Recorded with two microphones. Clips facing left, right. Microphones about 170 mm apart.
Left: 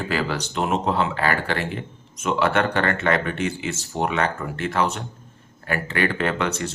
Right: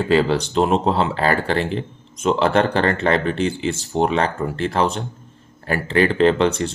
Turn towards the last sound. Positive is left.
turn(degrees=-30)  # may be behind; listen again after turning